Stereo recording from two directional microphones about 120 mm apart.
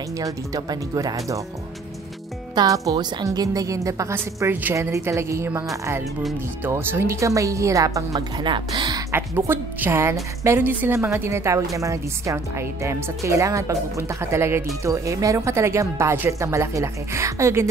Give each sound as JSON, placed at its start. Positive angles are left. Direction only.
{"t": 0.2, "sound": "a woman's voice", "side_deg": -30}
{"t": 2.5, "sound": "a woman's voice", "side_deg": -30}
{"t": 8.5, "sound": "speech", "side_deg": -40}
{"t": 9.1, "sound": "a woman's voice", "side_deg": -20}